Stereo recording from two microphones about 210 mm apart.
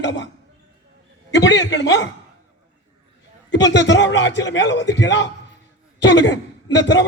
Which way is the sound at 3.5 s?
55° left (ahead or behind).